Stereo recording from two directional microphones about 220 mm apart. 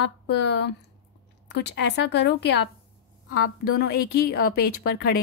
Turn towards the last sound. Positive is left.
turn(degrees=45)  # may be behind; listen again after turning